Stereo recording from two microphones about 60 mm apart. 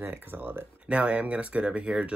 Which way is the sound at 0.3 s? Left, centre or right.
Right.